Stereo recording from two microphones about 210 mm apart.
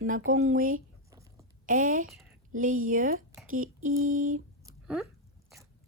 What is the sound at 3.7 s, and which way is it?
Speech, 80° right.